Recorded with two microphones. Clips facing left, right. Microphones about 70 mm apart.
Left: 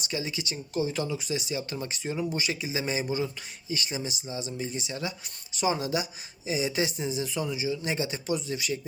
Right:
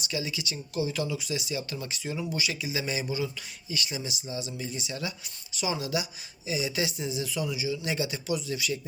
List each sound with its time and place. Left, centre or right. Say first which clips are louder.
0.1 s speech: left 1 dB; left